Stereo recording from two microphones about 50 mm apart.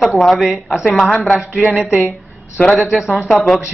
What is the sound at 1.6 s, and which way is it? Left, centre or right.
Speech, centre.